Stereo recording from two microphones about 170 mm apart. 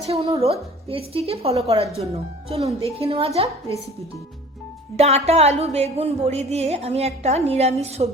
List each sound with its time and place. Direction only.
0.1 s a woman's voice: 35° right (ahead or behind)
4.9 s a woman's voice: 40° right (ahead or behind)